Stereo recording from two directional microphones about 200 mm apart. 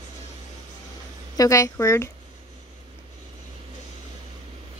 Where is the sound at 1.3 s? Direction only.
15° left (ahead or behind).